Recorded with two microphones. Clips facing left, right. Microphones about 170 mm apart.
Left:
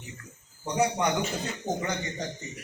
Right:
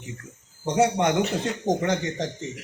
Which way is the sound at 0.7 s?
85° right.